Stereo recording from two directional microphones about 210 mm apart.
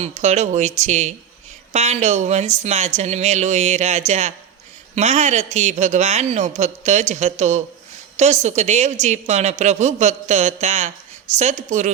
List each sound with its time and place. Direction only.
0.0 s a woman's voice: 35° right (ahead or behind)